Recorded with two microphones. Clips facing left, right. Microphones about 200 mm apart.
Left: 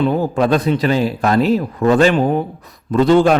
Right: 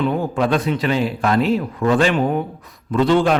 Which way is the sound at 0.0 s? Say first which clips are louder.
Left 3 dB; 35° left (ahead or behind).